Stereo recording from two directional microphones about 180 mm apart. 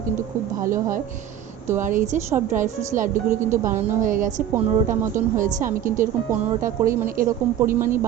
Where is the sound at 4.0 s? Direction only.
45° right (ahead or behind).